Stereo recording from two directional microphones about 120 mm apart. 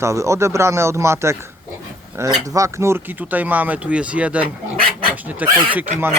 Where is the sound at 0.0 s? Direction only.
25° right (ahead or behind).